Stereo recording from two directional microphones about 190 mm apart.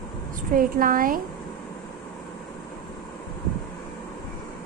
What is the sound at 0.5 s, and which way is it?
Speech, 45° right (ahead or behind).